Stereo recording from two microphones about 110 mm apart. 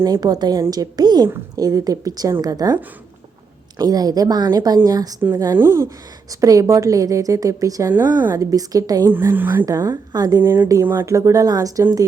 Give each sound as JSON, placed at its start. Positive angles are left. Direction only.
{"t": 0.0, "sound": "a woman's voice", "side_deg": -35}
{"t": 3.8, "sound": "a woman's voice", "side_deg": -35}
{"t": 5.5, "sound": "a woman's voice", "side_deg": -25}
{"t": 7.9, "sound": "speech", "side_deg": -20}
{"t": 8.4, "sound": "a woman's voice", "side_deg": -30}
{"t": 9.0, "sound": "speech", "side_deg": -20}
{"t": 9.6, "sound": "a woman's voice", "side_deg": -35}
{"t": 10.4, "sound": "speech", "side_deg": -25}